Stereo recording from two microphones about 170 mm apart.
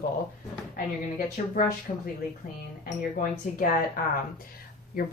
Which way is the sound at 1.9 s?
40° left (ahead or behind).